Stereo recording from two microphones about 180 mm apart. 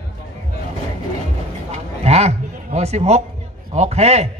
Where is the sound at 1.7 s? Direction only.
35° right (ahead or behind).